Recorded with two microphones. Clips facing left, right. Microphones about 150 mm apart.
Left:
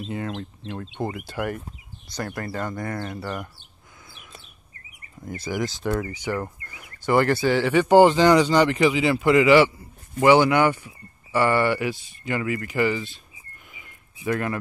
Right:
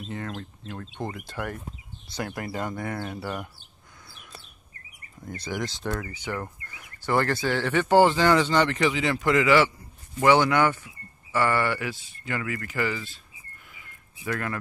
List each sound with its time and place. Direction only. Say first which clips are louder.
0.1 s speech: left 3 dB; 10° left (ahead or behind)
2.1 s speech: left 2 dB; 10° right (ahead or behind)
5.3 s speech: left 4 dB; 5° left (ahead or behind)
13.7 s a sound: left 2 dB; 20° left (ahead or behind)